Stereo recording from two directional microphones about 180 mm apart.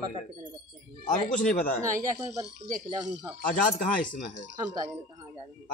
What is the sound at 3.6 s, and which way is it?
Speech, 50° left (ahead or behind).